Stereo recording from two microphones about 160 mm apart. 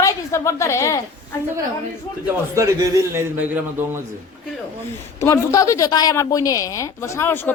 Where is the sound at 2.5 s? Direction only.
20° right (ahead or behind).